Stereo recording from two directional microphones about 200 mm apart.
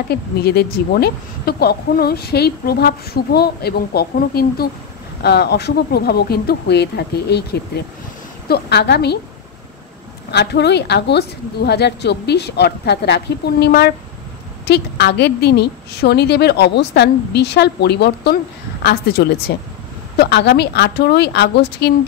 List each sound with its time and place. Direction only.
0.1 s a woman's voice: 55° left (ahead or behind)
10.3 s a woman's voice: 55° left (ahead or behind)